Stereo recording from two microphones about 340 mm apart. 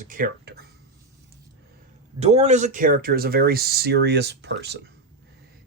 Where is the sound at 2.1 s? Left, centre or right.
Centre.